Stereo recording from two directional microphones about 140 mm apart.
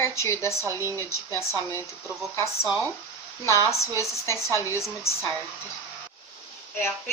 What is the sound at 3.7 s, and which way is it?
Speech, 20° left (ahead or behind).